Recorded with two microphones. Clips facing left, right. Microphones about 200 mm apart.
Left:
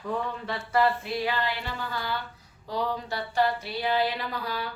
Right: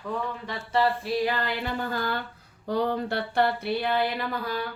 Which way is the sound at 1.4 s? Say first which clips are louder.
Right 3 dB; 50° right (ahead or behind).